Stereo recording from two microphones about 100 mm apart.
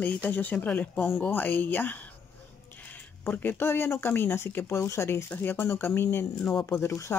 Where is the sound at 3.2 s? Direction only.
20° left (ahead or behind).